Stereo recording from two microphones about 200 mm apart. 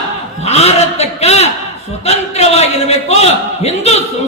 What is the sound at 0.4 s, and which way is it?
A man's voice, 30° left (ahead or behind).